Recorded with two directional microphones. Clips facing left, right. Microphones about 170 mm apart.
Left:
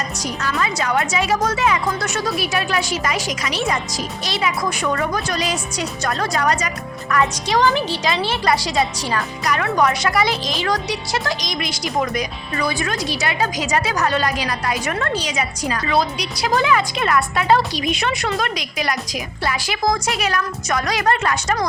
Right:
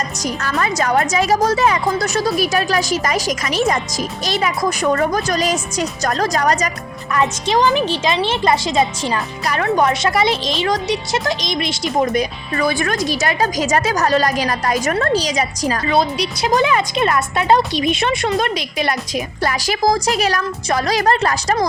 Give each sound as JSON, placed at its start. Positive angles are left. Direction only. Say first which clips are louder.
{"t": 0.4, "sound": "a woman's voice", "louder": "right 3 dB", "side_deg": -45}
{"t": 7.1, "sound": "speech", "louder": "right 2 dB", "side_deg": -20}
{"t": 12.5, "sound": "a woman's voice", "louder": "right 4 dB", "side_deg": -50}
{"t": 16.0, "sound": "speech", "louder": "right 2 dB", "side_deg": -25}
{"t": 19.4, "sound": "a woman's voice", "louder": "right 3 dB", "side_deg": -40}